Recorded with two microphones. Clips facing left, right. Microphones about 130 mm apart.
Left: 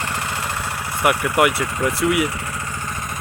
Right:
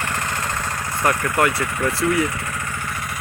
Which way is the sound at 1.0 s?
15° left (ahead or behind).